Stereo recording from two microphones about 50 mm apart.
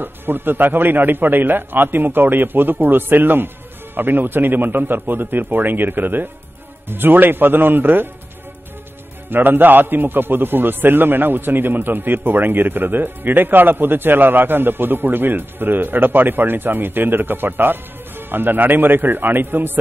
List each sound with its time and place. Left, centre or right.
0.0 s a man's voice: right
9.3 s a man's voice: right